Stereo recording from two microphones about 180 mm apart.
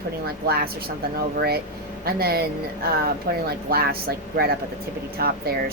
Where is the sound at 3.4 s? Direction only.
60° right (ahead or behind).